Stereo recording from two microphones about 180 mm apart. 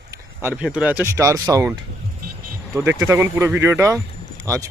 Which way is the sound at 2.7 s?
15° right (ahead or behind).